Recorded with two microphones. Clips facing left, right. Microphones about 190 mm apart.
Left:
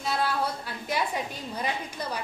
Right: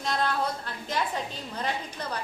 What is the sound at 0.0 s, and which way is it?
A woman's voice, 5° left (ahead or behind).